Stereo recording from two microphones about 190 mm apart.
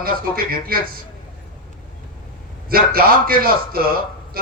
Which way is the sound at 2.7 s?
50° right (ahead or behind).